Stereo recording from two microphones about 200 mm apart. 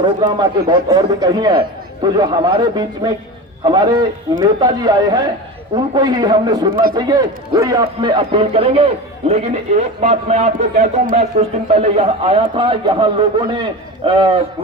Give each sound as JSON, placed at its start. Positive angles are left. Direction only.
{"t": 0.0, "sound": "a man's voice", "side_deg": -20}